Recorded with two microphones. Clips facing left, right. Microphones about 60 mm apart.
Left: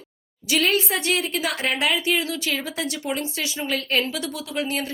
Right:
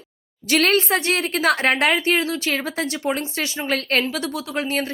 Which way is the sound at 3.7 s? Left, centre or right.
Right.